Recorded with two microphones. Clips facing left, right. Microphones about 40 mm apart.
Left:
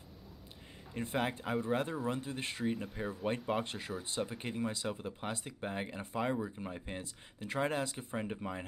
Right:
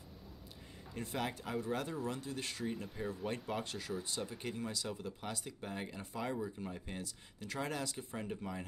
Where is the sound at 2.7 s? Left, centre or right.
Centre.